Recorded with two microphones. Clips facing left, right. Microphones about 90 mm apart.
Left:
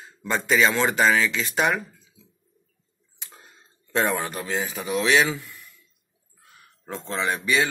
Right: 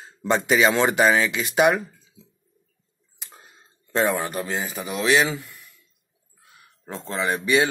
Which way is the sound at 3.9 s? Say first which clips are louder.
Right 2 dB; centre (ahead or behind).